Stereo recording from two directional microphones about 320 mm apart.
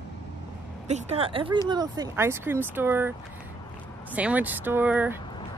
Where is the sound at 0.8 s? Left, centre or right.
Right.